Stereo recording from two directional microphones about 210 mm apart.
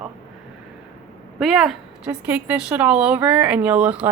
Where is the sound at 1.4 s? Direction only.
Centre (ahead or behind).